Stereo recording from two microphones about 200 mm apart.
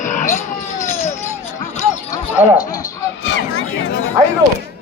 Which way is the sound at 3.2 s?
65° left (ahead or behind).